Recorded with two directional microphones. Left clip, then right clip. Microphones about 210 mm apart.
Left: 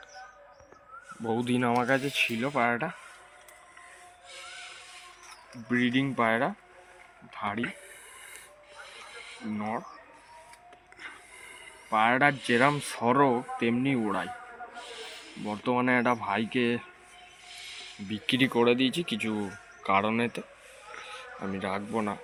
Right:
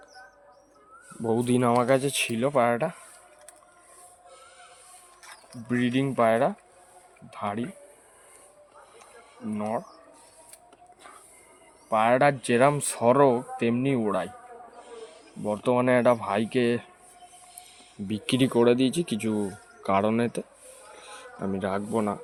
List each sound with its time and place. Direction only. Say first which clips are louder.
1.5 s speech: right 4 dB; 60° right (ahead or behind)
4.3 s a sound: left 8 dB; centre (ahead or behind)
5.6 s speech: right 1 dB; 65° right (ahead or behind)
8.8 s music: left 8 dB; centre (ahead or behind)
9.6 s speech: right 4 dB; 60° right (ahead or behind)
11.9 s speech: right 3 dB; 65° right (ahead or behind)
14.8 s a sound: left 3 dB; centre (ahead or behind)
15.4 s speech: right 4 dB; 65° right (ahead or behind)
17.5 s music: left 8 dB; centre (ahead or behind)
18.1 s speech: right 2 dB; 55° right (ahead or behind)